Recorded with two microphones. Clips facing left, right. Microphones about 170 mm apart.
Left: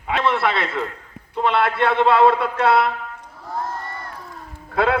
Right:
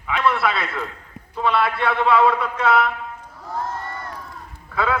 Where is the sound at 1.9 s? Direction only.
25° left (ahead or behind).